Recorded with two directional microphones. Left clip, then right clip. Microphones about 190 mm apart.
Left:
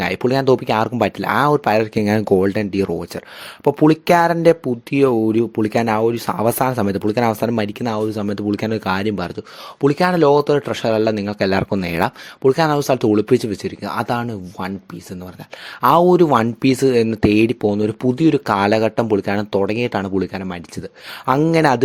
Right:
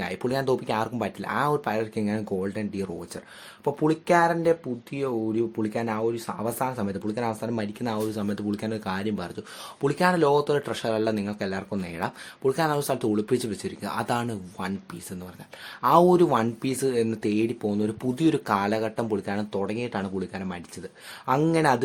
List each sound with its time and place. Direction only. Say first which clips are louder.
0.0 s speech: left 10 dB; 40° left (ahead or behind)
15.8 s speech: left 6 dB; 40° left (ahead or behind)